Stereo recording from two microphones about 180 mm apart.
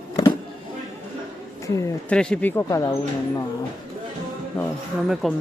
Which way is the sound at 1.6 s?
15° left (ahead or behind).